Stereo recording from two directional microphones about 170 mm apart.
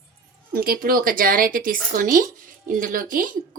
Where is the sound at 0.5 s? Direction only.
60° right (ahead or behind).